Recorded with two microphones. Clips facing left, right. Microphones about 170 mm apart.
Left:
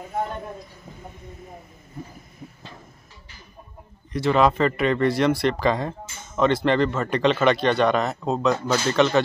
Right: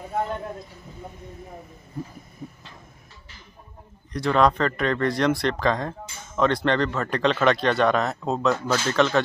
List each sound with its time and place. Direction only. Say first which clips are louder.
4.1 s speech: left 1 dB; centre (ahead or behind)